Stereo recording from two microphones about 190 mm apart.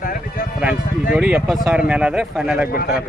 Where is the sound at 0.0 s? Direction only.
50° left (ahead or behind).